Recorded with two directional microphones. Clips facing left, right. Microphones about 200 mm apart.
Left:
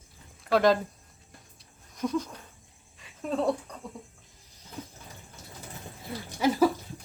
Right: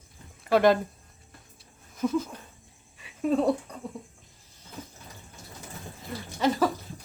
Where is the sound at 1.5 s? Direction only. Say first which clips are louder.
Right 5 dB; 5° right (ahead or behind).